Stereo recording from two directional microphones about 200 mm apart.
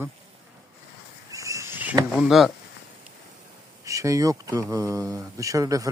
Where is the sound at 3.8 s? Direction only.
15° right (ahead or behind).